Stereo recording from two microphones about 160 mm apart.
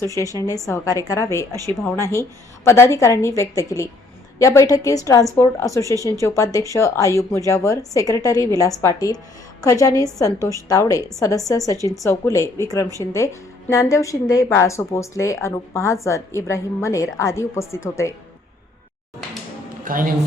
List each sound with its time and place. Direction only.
0.0 s a woman's voice: 20° left (ahead or behind)
10.3 s a woman's voice: 20° right (ahead or behind)
10.7 s a woman's voice: 20° left (ahead or behind)
19.8 s a man's voice: 60° right (ahead or behind)